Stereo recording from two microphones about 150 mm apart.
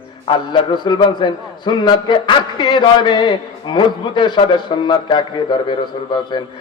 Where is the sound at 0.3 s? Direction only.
30° left (ahead or behind).